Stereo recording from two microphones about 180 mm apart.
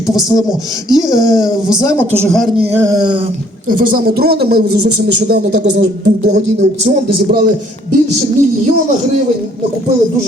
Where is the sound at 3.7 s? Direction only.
50° right (ahead or behind); by 6.3 s 80° right.